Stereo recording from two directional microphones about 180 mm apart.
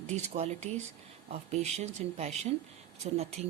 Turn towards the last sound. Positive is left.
turn(degrees=-35)  # may be behind; listen again after turning